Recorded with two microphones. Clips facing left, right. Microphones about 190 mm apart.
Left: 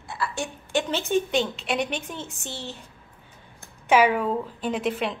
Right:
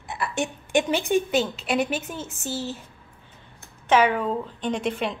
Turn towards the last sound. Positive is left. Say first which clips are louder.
# even
turn(degrees=0)  # may be behind; listen again after turning